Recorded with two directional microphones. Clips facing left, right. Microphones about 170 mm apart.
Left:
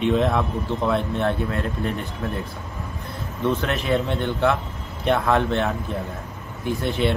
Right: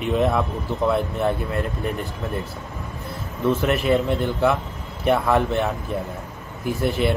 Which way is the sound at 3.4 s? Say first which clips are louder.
Right 3 dB; 5° right (ahead or behind).